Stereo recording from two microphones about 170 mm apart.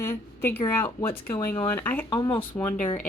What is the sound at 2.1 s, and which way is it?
Speech, 25° left (ahead or behind).